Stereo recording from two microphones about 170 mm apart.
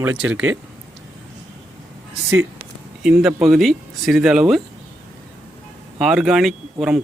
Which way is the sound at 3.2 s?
5° right (ahead or behind).